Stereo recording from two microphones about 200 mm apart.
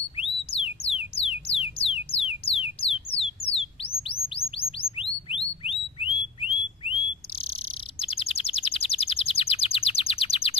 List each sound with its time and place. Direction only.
0.5 s music: 30° left (ahead or behind)
2.4 s a sound: 30° left (ahead or behind)
4.1 s bird: 30° left (ahead or behind)